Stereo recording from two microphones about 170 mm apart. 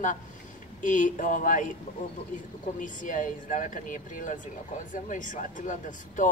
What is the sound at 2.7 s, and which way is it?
Speech, 50° left (ahead or behind).